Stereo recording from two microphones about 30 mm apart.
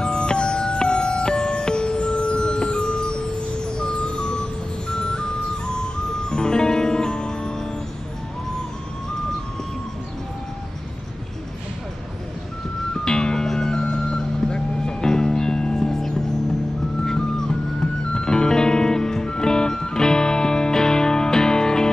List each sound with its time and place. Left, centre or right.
0.0 s music: left
13.0 s music: left